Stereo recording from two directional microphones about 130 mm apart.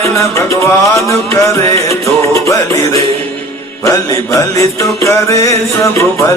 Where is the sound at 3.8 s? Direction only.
25° left (ahead or behind).